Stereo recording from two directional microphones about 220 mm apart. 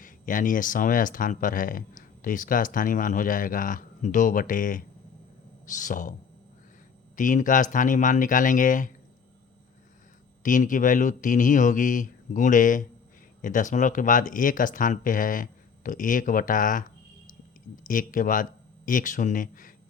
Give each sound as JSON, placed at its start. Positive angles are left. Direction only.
{"t": 0.0, "sound": "speech", "side_deg": 35}
{"t": 7.2, "sound": "speech", "side_deg": 35}
{"t": 10.4, "sound": "speech", "side_deg": 35}
{"t": 17.8, "sound": "speech", "side_deg": 35}